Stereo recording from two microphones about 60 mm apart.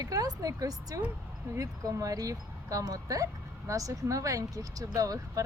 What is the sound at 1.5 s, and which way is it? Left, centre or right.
Speech, right.